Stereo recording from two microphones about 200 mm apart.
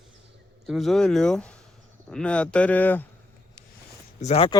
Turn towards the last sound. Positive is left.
turn(degrees=30)  # may be behind; listen again after turning